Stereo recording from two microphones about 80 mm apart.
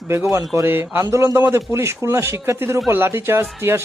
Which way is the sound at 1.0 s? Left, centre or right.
Right.